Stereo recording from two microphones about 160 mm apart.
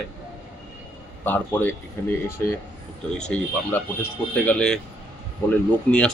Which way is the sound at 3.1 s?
10° left (ahead or behind).